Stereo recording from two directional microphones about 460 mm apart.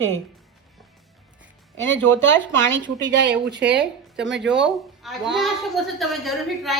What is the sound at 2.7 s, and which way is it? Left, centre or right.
Speech, right.